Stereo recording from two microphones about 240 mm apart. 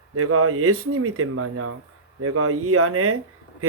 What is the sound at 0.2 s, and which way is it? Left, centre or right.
Speech, right.